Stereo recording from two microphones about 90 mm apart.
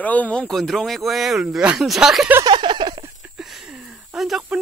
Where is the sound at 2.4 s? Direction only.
60° right (ahead or behind).